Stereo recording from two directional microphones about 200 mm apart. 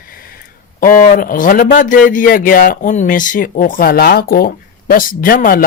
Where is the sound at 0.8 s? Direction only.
40° left (ahead or behind).